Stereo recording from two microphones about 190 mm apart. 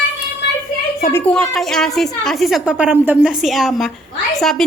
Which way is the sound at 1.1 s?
5° left (ahead or behind).